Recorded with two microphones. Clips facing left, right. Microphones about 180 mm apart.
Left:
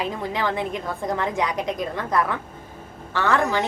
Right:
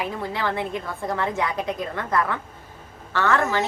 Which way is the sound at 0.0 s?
15° left (ahead or behind).